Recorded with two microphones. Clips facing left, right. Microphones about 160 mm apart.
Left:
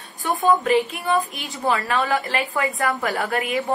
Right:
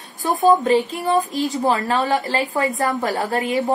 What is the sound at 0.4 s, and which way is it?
A woman's voice, 30° right (ahead or behind).